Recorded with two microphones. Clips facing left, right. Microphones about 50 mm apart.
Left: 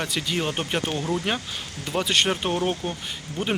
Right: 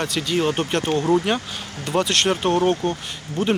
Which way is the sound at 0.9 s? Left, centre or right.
Right.